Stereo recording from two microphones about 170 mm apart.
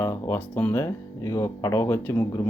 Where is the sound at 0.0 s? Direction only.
15° left (ahead or behind).